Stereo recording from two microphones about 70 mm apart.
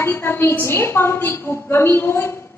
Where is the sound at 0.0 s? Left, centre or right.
Left.